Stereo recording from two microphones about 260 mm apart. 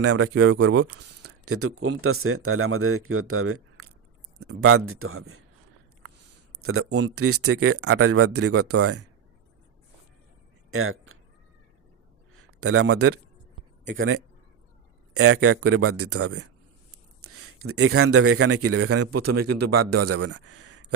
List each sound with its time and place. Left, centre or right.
0.0 s a man's voice: right
1.2 s a man's voice: right
6.6 s a man's voice: right
10.7 s a sound: right
12.5 s a man's voice: right